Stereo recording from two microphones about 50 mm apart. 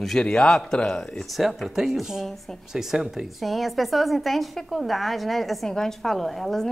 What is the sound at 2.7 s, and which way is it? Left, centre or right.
A woman's voice, centre.